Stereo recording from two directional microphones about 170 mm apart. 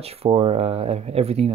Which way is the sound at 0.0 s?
35° right (ahead or behind).